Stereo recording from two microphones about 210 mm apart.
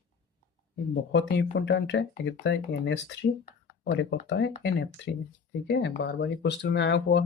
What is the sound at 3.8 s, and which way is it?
Speech, 60° left (ahead or behind).